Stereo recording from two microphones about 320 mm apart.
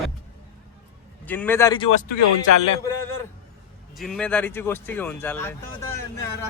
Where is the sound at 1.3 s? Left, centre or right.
Centre.